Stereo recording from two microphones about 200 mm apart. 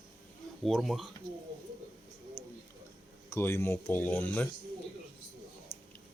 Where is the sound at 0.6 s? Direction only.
Centre (ahead or behind).